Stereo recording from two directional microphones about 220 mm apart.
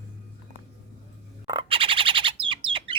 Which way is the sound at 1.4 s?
20° right (ahead or behind).